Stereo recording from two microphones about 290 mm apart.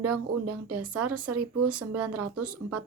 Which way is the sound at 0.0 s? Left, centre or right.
Right.